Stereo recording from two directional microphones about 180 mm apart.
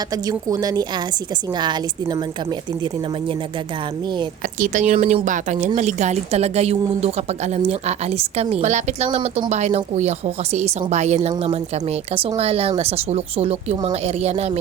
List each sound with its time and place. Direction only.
0.1 s a woman's voice: 20° right (ahead or behind)
4.6 s a woman's voice: 45° right (ahead or behind)